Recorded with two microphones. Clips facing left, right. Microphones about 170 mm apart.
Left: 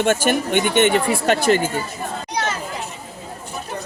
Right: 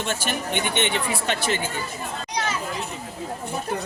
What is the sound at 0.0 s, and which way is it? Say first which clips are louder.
Speech: left 9 dB; 55° left (ahead or behind).